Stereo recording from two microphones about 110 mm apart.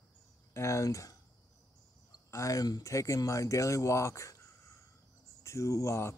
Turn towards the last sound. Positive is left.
turn(degrees=25)  # may be behind; listen again after turning